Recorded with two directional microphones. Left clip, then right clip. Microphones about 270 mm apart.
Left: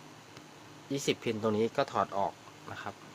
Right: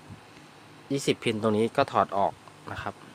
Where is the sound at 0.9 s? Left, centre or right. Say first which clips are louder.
Right 5 dB; right.